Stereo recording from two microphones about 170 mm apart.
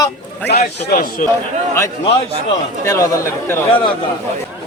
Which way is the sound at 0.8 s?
60° left (ahead or behind).